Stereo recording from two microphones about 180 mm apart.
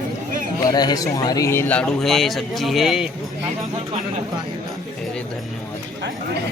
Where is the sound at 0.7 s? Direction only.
20° left (ahead or behind); by 3.0 s centre (ahead or behind).